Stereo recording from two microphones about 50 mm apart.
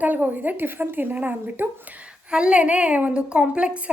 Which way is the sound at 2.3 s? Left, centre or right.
Centre.